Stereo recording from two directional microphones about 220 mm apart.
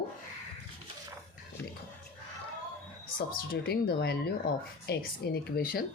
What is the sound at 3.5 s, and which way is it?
Speech, 45° left (ahead or behind).